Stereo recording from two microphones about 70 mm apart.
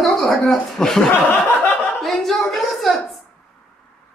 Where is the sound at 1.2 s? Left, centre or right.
Left.